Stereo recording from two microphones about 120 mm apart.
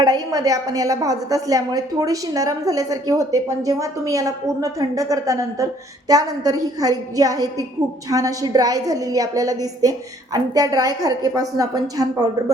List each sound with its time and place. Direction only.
0.0 s a woman's voice: 30° right (ahead or behind)